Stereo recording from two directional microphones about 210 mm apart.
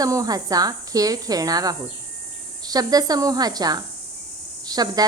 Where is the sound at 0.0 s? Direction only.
15° right (ahead or behind).